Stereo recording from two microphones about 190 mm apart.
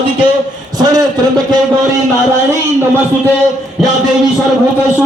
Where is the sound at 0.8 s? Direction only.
20° right (ahead or behind).